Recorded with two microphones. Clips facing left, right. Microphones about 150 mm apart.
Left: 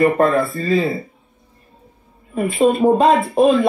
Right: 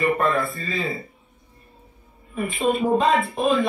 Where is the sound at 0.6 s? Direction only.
40° left (ahead or behind).